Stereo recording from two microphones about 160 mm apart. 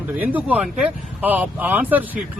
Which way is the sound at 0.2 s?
10° right (ahead or behind).